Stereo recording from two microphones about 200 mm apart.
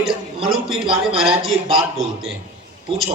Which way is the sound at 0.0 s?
Centre (ahead or behind).